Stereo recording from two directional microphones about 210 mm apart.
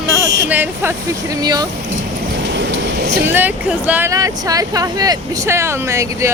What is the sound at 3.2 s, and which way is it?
Speech, 10° right (ahead or behind).